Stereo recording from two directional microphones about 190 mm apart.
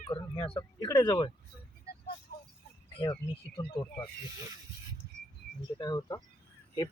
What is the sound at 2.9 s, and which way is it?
Speech, 30° left (ahead or behind).